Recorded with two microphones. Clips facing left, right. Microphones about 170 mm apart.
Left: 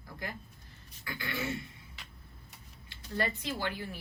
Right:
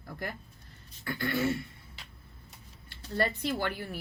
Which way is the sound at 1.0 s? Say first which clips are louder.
Right 7 dB; 50° right (ahead or behind).